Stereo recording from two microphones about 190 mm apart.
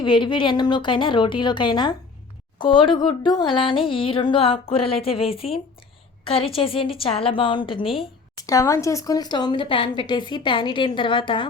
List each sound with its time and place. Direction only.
0.0 s speech: 25° left (ahead or behind)